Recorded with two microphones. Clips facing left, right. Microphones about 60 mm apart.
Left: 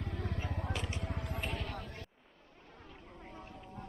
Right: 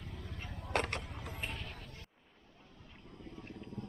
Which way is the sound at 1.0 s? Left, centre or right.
Left.